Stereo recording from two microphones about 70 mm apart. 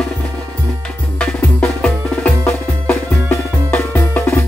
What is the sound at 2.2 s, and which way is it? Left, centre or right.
Music, left.